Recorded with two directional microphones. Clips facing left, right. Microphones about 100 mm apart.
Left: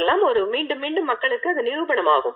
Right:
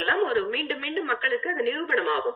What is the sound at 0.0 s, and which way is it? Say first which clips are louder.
A woman's voice: left 6 dB; 55° left (ahead or behind).